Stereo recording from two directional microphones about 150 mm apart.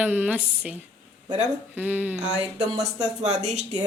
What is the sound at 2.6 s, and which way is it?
Speech, 25° right (ahead or behind).